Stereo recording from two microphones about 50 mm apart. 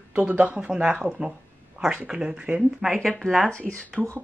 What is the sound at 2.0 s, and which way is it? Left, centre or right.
Speech, centre.